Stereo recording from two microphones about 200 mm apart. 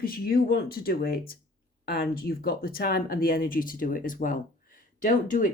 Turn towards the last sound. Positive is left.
turn(degrees=40)  # may be behind; listen again after turning